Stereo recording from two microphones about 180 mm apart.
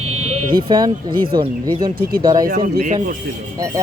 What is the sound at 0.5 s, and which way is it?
Speech, 25° right (ahead or behind).